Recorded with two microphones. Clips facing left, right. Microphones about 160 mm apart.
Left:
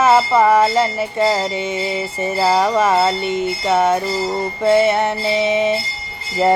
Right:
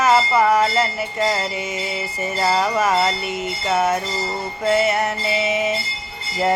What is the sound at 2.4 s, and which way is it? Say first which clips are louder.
Speech: left 4 dB; 10° left (ahead or behind).